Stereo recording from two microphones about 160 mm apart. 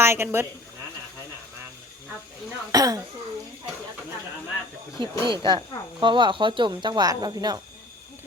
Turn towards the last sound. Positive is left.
turn(degrees=-25)  # may be behind; listen again after turning